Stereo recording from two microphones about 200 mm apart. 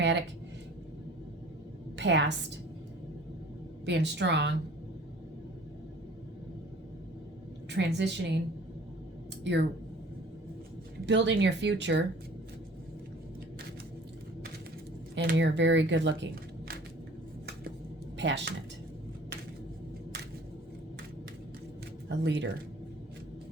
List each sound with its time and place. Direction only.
0.0 s a sound: 60° right (ahead or behind)
2.0 s a woman's voice: 60° right (ahead or behind)
3.8 s speech: 60° right (ahead or behind)
7.7 s speech: 60° right (ahead or behind)
9.4 s speech: 60° right (ahead or behind)
11.0 s speech: 60° right (ahead or behind)
15.1 s speech: 55° right (ahead or behind)
18.2 s speech: 60° right (ahead or behind)
22.2 s speech: 60° right (ahead or behind)